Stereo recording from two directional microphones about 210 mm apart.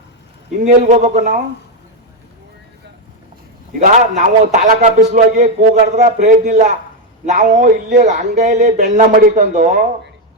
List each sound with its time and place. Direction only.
0.6 s speech: 35° right (ahead or behind)
3.8 s speech: 35° right (ahead or behind)